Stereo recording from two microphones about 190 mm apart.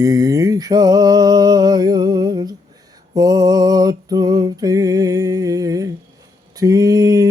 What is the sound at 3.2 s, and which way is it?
Music, 20° right (ahead or behind).